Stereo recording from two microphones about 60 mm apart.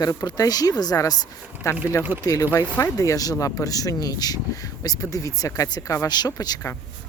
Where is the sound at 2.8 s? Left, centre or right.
Left.